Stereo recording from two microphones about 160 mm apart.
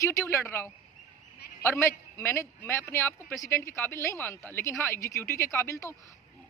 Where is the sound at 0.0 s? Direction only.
15° left (ahead or behind).